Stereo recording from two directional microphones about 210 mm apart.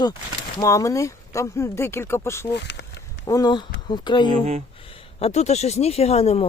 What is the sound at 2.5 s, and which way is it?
Speech, 55° left (ahead or behind).